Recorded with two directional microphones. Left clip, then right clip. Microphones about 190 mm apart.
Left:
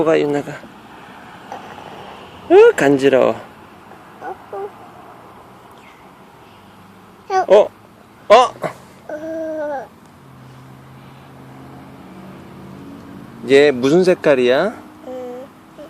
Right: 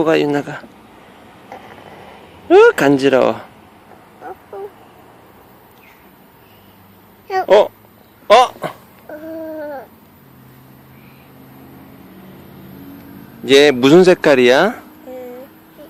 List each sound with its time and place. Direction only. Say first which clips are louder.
0.0 s speech: right 1 dB; 15° right (ahead or behind)
2.5 s speech: even; 10° right (ahead or behind)
7.3 s a sound: even; centre (ahead or behind)
13.4 s speech: right 2 dB; 25° right (ahead or behind)